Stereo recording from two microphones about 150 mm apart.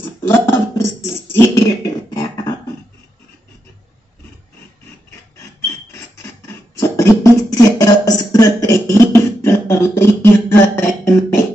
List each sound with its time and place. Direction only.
0.0 s a sound: 15° left (ahead or behind)
2.0 s beatboxing: 25° left (ahead or behind)
5.9 s beatboxing: 20° left (ahead or behind)